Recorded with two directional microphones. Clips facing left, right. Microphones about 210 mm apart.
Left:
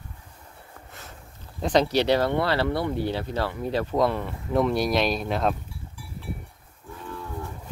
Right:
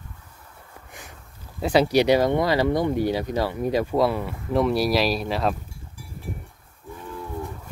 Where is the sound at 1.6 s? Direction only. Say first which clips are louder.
Right 3 dB; 10° right (ahead or behind).